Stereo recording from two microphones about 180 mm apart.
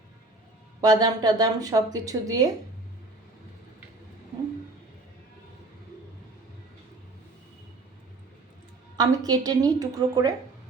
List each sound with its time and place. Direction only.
0.8 s a woman's voice: 20° right (ahead or behind)
9.0 s a woman's voice: 20° right (ahead or behind)